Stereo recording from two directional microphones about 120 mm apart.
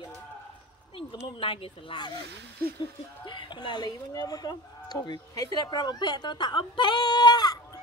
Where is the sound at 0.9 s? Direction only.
50° left (ahead or behind).